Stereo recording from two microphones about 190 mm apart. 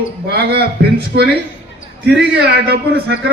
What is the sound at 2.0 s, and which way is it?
A man's voice, 60° right (ahead or behind).